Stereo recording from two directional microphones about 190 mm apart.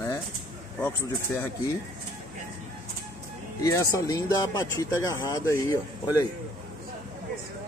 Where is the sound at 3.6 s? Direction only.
15° left (ahead or behind).